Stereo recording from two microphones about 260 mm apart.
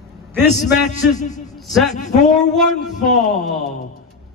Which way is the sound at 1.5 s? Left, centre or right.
Centre.